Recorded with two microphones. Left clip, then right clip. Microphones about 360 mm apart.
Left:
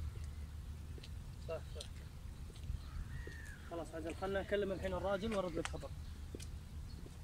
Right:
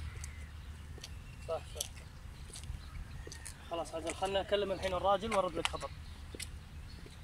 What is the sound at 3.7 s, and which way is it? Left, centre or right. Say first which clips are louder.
Speech: right 7 dB; right.